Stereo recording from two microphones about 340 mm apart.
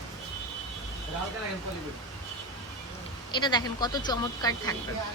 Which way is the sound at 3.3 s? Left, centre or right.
Centre.